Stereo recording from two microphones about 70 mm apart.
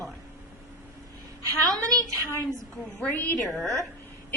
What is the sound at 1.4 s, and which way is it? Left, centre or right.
Speech, right.